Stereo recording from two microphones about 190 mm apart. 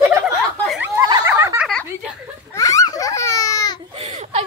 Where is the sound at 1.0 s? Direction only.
15° right (ahead or behind).